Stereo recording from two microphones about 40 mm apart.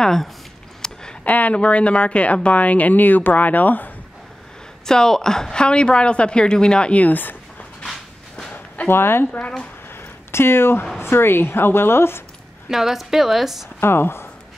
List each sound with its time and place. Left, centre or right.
0.8 s a sound: centre
1.2 s speech: left
4.8 s a woman's voice: centre
6.9 s speech: left
8.5 s a sound: left
8.9 s speech: left
9.2 s speech: left
9.9 s a sound: left
11.0 s speech: left
12.6 s a woman's voice: centre
13.7 s speech: left